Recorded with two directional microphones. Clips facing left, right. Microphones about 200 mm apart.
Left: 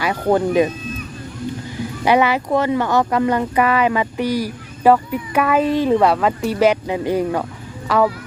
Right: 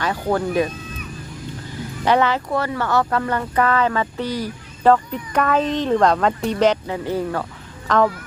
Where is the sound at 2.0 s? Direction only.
10° left (ahead or behind).